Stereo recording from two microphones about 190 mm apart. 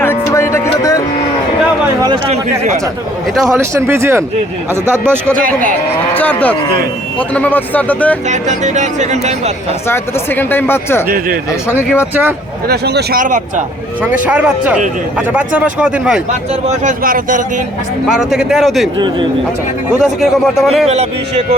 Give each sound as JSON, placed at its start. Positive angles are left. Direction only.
{"t": 0.0, "sound": "music", "side_deg": 15}
{"t": 3.3, "sound": "a man's voice", "side_deg": 0}
{"t": 3.6, "sound": "speech", "side_deg": -15}
{"t": 5.4, "sound": "a man's voice", "side_deg": -45}
{"t": 6.1, "sound": "speech", "side_deg": 10}
{"t": 8.3, "sound": "speech", "side_deg": -40}
{"t": 9.9, "sound": "speech", "side_deg": 10}
{"t": 12.6, "sound": "speech", "side_deg": -60}
{"t": 14.0, "sound": "speech", "side_deg": -5}
{"t": 16.6, "sound": "a man's voice", "side_deg": -45}
{"t": 18.1, "sound": "a man's voice", "side_deg": 0}
{"t": 18.9, "sound": "speech", "side_deg": -25}
{"t": 20.0, "sound": "a man's voice", "side_deg": 0}
{"t": 20.8, "sound": "speech", "side_deg": -35}